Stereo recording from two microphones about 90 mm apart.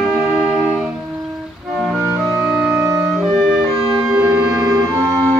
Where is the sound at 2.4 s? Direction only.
10° right (ahead or behind).